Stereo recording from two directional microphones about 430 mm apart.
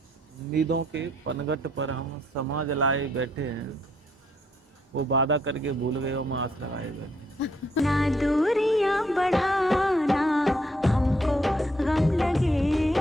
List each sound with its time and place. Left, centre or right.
0.5 s speech: right
4.9 s speech: right
7.8 s music: centre